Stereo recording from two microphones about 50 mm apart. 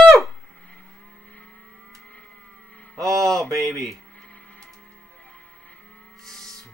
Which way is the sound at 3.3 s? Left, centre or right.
Right.